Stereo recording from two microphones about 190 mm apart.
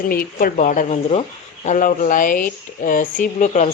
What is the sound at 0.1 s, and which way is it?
Speech, 50° left (ahead or behind).